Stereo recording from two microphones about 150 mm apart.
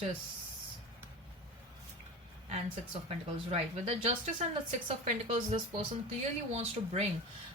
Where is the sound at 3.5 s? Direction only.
40° right (ahead or behind).